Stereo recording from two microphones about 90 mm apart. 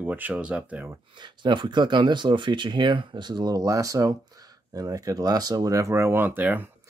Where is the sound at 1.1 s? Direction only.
60° right (ahead or behind).